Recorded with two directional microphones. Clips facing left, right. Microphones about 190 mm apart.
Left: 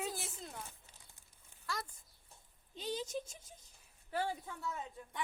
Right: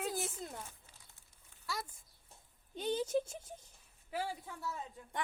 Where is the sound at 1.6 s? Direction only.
5° right (ahead or behind).